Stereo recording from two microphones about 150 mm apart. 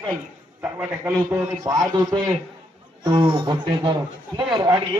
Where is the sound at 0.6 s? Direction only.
15° right (ahead or behind).